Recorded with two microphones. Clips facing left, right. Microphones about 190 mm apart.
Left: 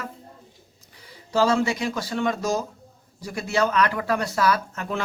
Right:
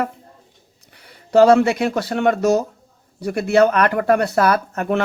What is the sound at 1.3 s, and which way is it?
Speech, 65° right (ahead or behind).